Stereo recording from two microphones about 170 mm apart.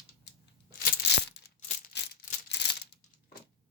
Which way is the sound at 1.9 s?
90° left.